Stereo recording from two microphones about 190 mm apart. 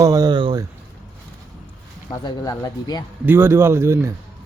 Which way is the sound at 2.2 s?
20° left (ahead or behind).